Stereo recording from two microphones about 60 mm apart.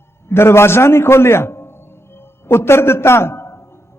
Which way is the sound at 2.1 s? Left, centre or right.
Left.